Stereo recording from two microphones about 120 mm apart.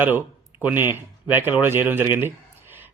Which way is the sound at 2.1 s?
15° right (ahead or behind).